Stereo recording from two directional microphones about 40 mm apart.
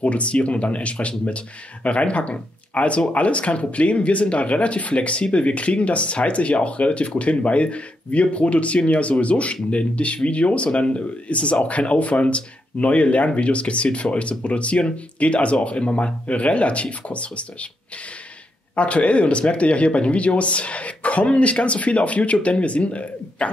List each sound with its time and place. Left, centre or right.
0.0 s speech: left
18.8 s speech: left